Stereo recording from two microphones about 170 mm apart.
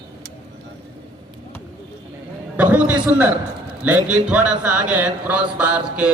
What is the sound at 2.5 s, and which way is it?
A man's voice, 10° right (ahead or behind).